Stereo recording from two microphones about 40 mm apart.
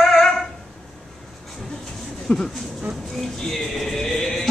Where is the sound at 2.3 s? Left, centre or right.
Left.